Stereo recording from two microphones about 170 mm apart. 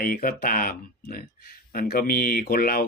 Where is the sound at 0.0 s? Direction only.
60° left (ahead or behind).